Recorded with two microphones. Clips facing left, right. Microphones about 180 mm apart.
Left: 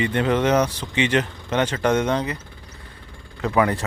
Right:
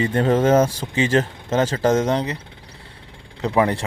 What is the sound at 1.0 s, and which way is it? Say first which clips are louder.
Speech: right 2 dB; 40° right (ahead or behind).